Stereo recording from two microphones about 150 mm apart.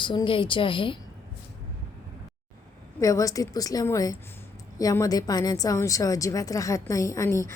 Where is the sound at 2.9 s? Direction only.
20° left (ahead or behind).